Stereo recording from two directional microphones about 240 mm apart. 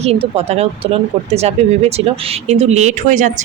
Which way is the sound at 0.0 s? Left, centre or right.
Right.